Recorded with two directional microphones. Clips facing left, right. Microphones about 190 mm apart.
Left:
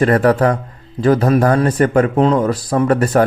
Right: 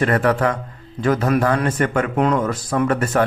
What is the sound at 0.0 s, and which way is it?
Speech, 35° left (ahead or behind).